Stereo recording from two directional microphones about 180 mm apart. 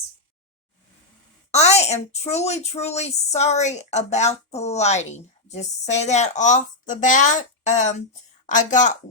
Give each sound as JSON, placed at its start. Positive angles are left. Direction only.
{"t": 1.5, "sound": "a woman's voice", "side_deg": 35}